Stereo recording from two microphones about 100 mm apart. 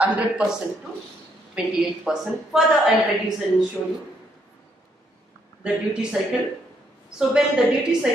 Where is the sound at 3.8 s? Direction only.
15° left (ahead or behind).